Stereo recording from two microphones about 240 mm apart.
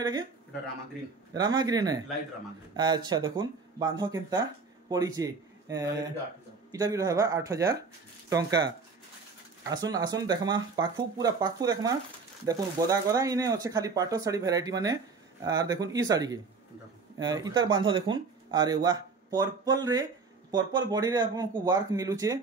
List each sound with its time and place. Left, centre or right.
1.3 s speech: centre